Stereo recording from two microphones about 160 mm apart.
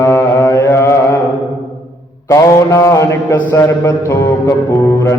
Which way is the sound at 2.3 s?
20° left (ahead or behind).